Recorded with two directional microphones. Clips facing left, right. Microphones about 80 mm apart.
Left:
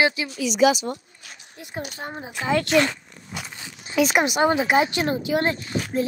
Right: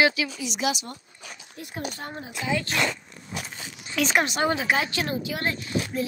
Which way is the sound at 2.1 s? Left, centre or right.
Left.